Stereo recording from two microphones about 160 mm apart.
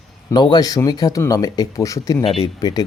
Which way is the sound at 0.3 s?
25° left (ahead or behind).